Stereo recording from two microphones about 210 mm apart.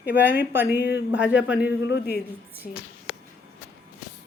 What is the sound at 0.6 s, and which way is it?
Speech, 50° left (ahead or behind).